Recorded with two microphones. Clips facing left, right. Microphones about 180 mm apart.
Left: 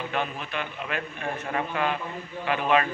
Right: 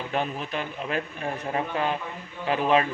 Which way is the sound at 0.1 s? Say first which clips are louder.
Right 2 dB; 40° right (ahead or behind).